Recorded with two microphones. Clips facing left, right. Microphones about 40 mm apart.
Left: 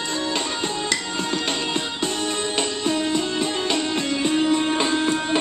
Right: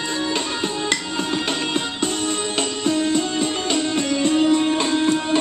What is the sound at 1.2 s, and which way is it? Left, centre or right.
Music, centre.